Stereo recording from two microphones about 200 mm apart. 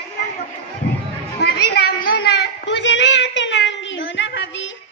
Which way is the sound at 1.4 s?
50° left (ahead or behind).